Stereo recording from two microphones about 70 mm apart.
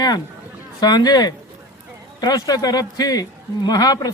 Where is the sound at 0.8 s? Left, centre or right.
Left.